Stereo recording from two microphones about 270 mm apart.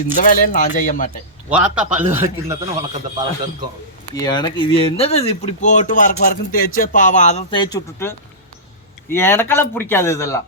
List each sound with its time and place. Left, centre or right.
0.2 s speech: left
1.5 s a man's voice: centre
4.1 s a man's voice: centre